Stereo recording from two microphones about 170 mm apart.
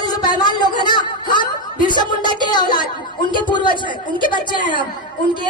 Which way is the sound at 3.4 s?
25° left (ahead or behind).